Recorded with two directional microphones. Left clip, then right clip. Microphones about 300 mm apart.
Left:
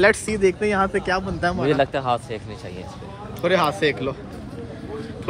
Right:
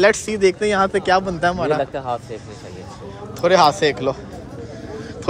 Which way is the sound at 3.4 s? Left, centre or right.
Centre.